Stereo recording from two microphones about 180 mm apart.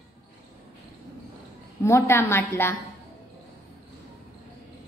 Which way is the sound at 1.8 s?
15° left (ahead or behind).